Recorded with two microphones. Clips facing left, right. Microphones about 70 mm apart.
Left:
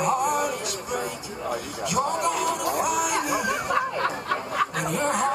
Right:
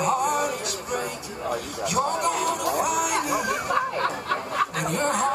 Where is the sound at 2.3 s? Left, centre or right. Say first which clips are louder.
Even; right.